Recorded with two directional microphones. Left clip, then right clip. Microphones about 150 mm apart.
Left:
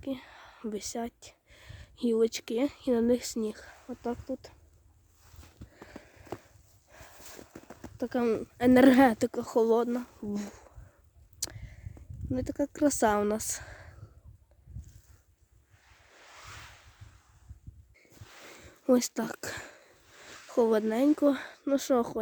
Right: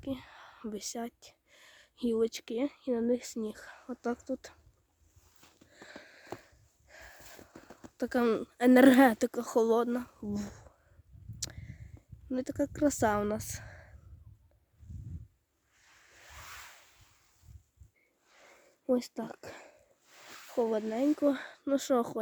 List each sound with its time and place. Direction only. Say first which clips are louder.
0.0 s speech: left 2 dB; 5° right (ahead or behind)
3.8 s speech: even; 30° right (ahead or behind)
5.5 s sniff: even; 20° right (ahead or behind)
6.8 s a sound: right 1 dB; 30° right (ahead or behind)
7.3 s clip-clop: left 4 dB; 10° right (ahead or behind)
7.9 s speech: even; 30° right (ahead or behind); by 10.8 s 10° right (ahead or behind)
11.3 s a sound: left 3 dB; 5° right (ahead or behind)
12.3 s speech: left 1 dB; 15° right (ahead or behind)
15.8 s waves: left 1 dB; 35° right (ahead or behind)
18.9 s speech: left 5 dB; 15° left (ahead or behind)
20.3 s a sound: left 2 dB; 45° right (ahead or behind)
20.6 s speech: left 5 dB; 20° left (ahead or behind)
21.2 s speech: left 3 dB; centre (ahead or behind)